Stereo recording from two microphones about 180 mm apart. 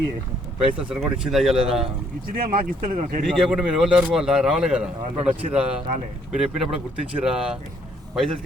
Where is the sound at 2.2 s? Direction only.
55° right (ahead or behind).